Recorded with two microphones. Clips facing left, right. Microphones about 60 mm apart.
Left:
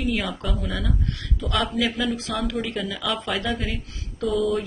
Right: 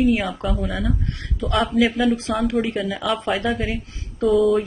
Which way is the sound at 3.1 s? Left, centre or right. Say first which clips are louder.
Right 5 dB; centre.